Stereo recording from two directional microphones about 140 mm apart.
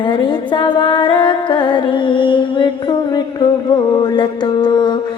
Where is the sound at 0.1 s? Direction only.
35° left (ahead or behind).